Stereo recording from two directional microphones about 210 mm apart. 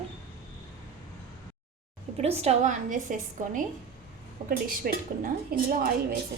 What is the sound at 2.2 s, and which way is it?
A woman's voice, 30° right (ahead or behind).